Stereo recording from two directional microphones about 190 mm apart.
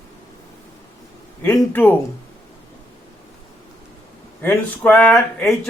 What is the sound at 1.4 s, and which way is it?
Speech, 15° left (ahead or behind).